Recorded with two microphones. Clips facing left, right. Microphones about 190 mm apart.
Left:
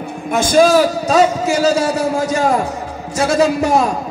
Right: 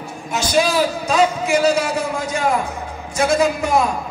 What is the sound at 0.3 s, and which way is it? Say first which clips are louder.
A man's voice: left 7 dB; 50° left (ahead or behind).